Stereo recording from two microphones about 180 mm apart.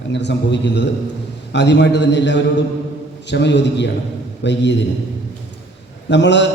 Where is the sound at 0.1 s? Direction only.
75° left (ahead or behind).